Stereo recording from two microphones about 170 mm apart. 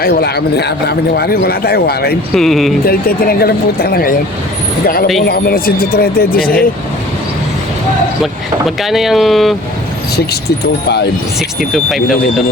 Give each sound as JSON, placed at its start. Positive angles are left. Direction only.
{"t": 0.0, "sound": "speech", "side_deg": 70}
{"t": 2.3, "sound": "speech", "side_deg": 0}
{"t": 2.8, "sound": "speech", "side_deg": 60}
{"t": 5.3, "sound": "speech", "side_deg": 60}
{"t": 8.2, "sound": "speech", "side_deg": 0}
{"t": 11.7, "sound": "speech", "side_deg": 0}